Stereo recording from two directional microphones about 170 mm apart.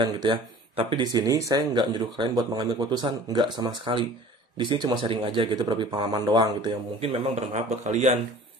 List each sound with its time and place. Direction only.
0.0 s speech: 30° right (ahead or behind)